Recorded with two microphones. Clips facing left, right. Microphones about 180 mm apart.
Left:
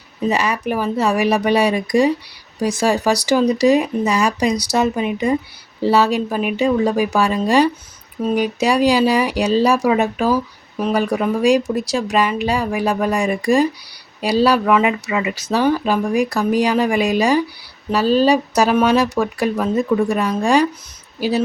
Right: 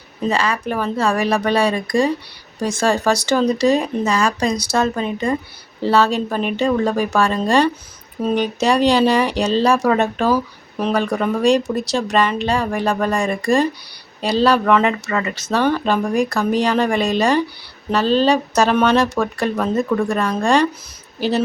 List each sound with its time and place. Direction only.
0.3 s speech: 15° left (ahead or behind)